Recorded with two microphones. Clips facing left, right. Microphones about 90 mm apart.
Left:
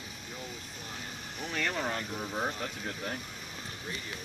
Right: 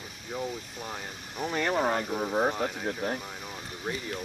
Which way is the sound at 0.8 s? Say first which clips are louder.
Right 2 dB; 50° right (ahead or behind).